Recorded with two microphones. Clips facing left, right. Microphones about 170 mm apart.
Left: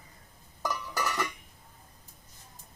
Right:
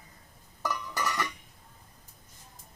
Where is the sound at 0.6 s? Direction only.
10° left (ahead or behind).